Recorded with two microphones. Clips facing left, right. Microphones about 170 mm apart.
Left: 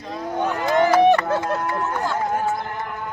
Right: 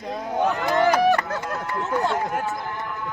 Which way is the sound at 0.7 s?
20° left (ahead or behind).